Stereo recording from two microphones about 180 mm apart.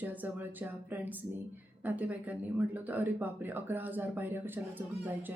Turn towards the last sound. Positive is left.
turn(degrees=-10)  # may be behind; listen again after turning